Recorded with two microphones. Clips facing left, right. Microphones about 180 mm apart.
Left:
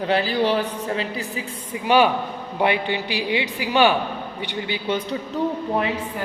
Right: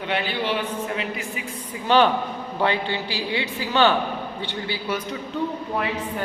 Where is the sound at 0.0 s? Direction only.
35° left (ahead or behind).